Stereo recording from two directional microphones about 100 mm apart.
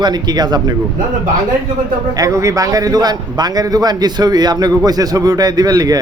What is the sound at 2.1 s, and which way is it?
A man's voice, 35° right (ahead or behind).